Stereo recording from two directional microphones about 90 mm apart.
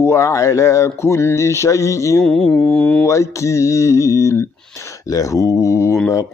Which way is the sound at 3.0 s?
35° left (ahead or behind).